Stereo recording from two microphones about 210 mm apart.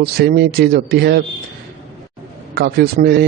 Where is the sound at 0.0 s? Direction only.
50° right (ahead or behind).